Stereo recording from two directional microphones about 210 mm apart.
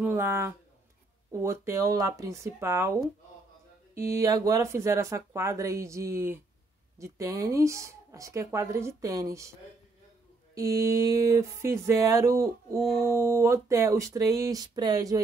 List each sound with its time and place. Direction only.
0.0 s speech: 10° right (ahead or behind)
3.9 s a sound: 45° right (ahead or behind)
4.2 s speech: 15° right (ahead or behind)
10.5 s speech: 15° right (ahead or behind)